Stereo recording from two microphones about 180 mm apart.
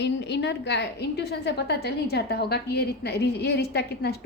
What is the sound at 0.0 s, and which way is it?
A woman's voice, 70° left (ahead or behind).